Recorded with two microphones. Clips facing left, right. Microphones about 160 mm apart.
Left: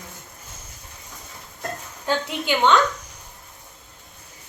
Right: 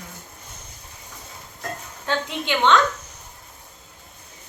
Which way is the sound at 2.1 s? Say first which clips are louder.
Left 1 dB; 10° left (ahead or behind).